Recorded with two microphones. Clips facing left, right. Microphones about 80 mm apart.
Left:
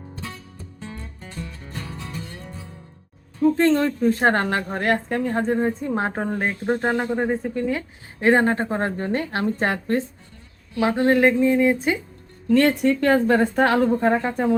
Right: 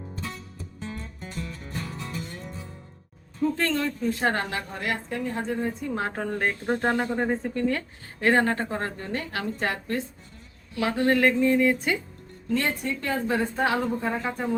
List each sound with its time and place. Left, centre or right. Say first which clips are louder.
1.6 s music: even; left
3.6 s a woman's voice: left 8 dB; left; by 7.9 s centre
8.2 s a woman's voice: left 4 dB; left
10.8 s speech: left 5 dB; left
12.5 s a woman's voice: left 9 dB; left